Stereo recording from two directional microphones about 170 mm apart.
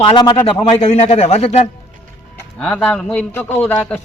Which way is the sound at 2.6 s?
5° left (ahead or behind).